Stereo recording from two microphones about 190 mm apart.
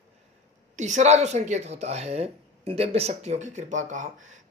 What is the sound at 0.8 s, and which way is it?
A man's voice, 40° right (ahead or behind).